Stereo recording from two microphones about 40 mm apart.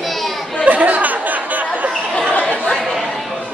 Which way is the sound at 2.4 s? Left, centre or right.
Left.